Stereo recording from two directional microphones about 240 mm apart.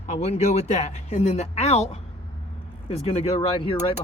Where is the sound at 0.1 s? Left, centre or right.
Left.